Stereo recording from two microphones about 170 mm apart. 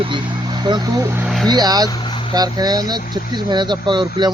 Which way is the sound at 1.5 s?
25° right (ahead or behind).